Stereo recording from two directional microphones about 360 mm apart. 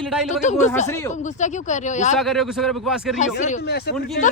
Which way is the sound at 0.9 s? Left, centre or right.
Centre.